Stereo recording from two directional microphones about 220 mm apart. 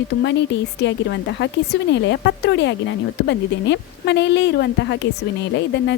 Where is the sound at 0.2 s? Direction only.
55° left (ahead or behind).